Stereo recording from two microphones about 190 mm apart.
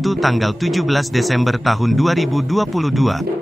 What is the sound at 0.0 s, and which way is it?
A man's voice, centre (ahead or behind).